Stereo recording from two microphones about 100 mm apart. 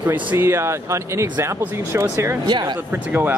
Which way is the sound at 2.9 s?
20° right (ahead or behind).